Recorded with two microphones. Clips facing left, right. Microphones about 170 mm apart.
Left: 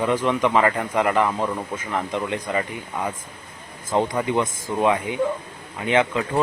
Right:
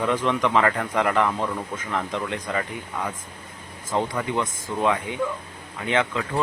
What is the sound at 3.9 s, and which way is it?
Speech, 15° left (ahead or behind).